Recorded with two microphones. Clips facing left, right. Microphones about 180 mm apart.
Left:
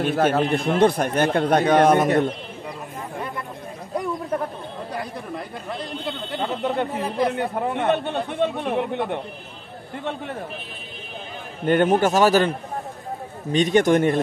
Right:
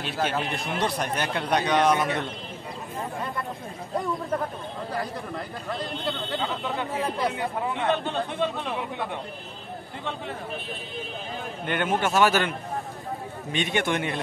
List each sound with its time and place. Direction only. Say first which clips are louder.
0.0 s a man's voice: left 8 dB; 50° left (ahead or behind)
6.4 s speech: left 9 dB; 50° left (ahead or behind)
11.6 s a man's voice: left 8 dB; 40° left (ahead or behind)